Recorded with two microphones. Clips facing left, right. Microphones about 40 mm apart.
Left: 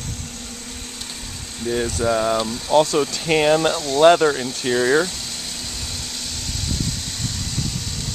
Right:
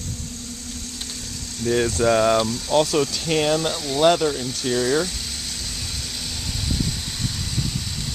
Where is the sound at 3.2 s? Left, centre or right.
Centre.